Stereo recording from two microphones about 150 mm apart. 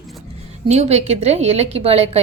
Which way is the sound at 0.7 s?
45° right (ahead or behind).